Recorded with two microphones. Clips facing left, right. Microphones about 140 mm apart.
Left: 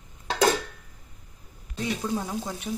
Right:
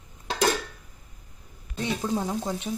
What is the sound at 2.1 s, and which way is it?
Frying, 20° right (ahead or behind).